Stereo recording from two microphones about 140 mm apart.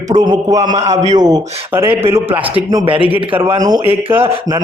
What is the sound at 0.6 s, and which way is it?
Speech, 55° right (ahead or behind).